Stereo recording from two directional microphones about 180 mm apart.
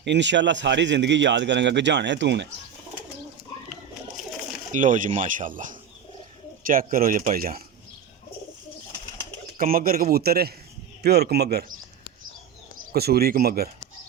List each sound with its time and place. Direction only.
0.0 s a man's voice: 75° right (ahead or behind)
4.7 s speech: 45° right (ahead or behind)
9.6 s a man's voice: 55° right (ahead or behind)
12.9 s a man's voice: 60° right (ahead or behind)